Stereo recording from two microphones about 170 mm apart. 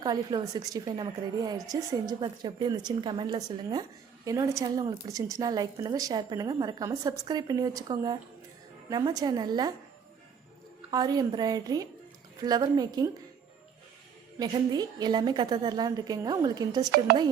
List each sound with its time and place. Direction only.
0.0 s a woman's voice: 25° right (ahead or behind)
10.9 s a woman's voice: 20° right (ahead or behind)
14.3 s a woman's voice: 25° right (ahead or behind)